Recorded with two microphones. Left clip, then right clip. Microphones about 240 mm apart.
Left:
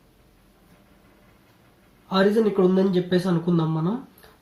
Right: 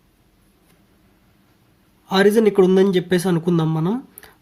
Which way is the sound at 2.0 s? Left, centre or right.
Right.